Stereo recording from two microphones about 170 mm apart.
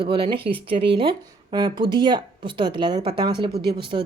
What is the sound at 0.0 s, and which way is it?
A woman's voice, 30° right (ahead or behind).